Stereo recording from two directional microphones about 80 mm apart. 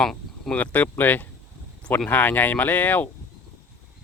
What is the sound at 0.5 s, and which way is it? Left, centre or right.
Speech, centre.